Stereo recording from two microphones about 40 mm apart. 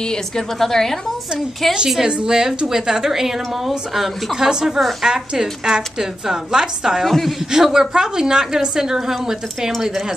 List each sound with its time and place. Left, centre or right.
0.6 s a woman's voice: centre
2.0 s a woman's voice: right
7.1 s speech: centre
7.5 s a woman's voice: centre